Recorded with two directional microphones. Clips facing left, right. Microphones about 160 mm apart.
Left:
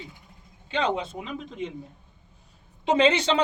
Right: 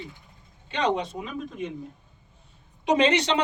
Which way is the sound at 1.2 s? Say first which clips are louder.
Right 1 dB; 25° left (ahead or behind).